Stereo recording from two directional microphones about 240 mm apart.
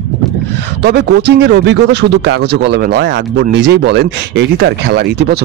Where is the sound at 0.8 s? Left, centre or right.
Right.